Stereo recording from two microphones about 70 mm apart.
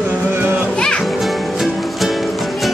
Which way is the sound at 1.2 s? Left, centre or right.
Centre.